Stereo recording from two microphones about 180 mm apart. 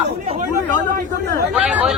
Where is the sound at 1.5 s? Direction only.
5° right (ahead or behind).